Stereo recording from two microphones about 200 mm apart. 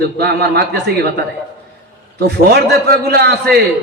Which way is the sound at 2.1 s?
55° right (ahead or behind).